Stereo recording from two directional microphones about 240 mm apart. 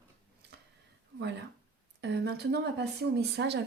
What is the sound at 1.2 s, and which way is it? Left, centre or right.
Speech, right.